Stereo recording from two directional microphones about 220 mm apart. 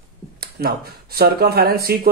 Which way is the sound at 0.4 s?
45° right (ahead or behind).